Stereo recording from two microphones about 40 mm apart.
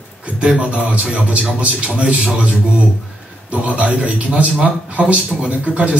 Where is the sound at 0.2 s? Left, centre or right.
Right.